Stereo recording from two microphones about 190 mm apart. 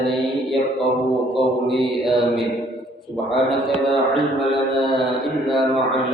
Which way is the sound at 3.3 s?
Centre (ahead or behind).